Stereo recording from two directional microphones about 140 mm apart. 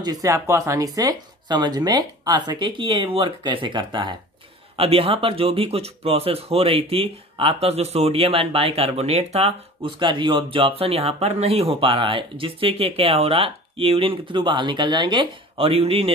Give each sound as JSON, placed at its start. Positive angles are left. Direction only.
{"t": 0.0, "sound": "speech", "side_deg": -25}